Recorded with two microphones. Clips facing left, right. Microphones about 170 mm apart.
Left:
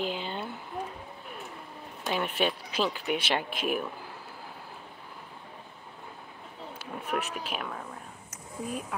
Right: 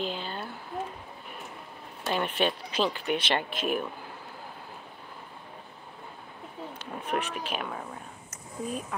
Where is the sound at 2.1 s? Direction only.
5° left (ahead or behind).